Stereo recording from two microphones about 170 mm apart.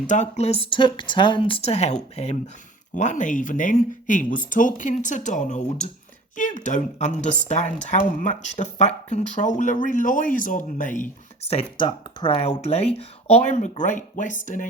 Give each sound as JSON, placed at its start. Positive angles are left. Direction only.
{"t": 0.1, "sound": "speech", "side_deg": 45}